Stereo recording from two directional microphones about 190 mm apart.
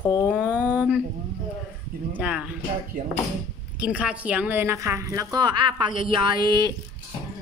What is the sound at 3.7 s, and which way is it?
A woman's voice, 5° right (ahead or behind).